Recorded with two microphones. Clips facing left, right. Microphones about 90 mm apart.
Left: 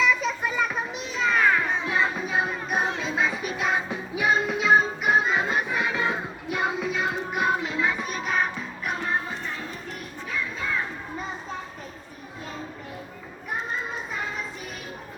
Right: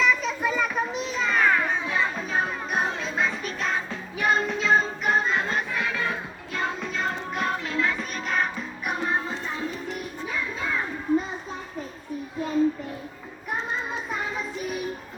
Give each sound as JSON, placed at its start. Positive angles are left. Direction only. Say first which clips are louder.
{"t": 0.0, "sound": "children playing", "louder": "even", "side_deg": 0}
{"t": 8.9, "sound": "music", "louder": "right 2 dB", "side_deg": -15}